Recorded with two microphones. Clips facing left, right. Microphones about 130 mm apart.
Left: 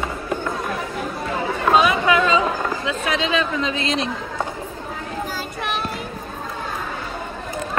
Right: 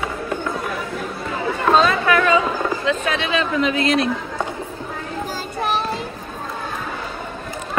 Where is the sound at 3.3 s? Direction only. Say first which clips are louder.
Right 3 dB; 25° left (ahead or behind).